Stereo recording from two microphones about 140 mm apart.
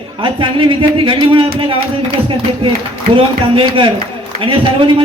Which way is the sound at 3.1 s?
40° right (ahead or behind).